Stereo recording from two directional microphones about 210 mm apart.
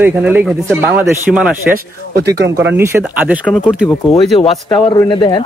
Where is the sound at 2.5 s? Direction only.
10° right (ahead or behind).